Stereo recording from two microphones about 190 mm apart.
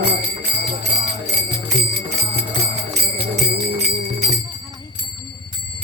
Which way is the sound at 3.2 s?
55° right (ahead or behind).